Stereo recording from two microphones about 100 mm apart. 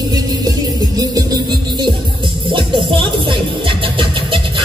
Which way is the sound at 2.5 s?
60° right (ahead or behind).